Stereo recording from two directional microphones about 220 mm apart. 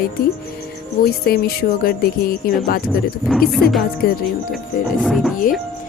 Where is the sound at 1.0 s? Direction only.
45° left (ahead or behind).